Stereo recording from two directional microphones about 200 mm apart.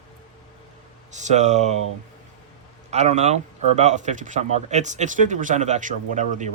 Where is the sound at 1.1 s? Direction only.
35° right (ahead or behind).